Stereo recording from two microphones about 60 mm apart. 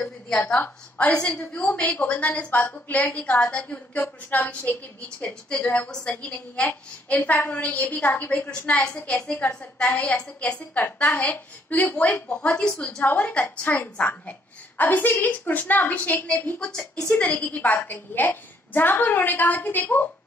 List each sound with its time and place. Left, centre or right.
0.6 s a woman's voice: left
13.0 s a woman's voice: left
16.5 s a woman's voice: centre
17.1 s a woman's voice: left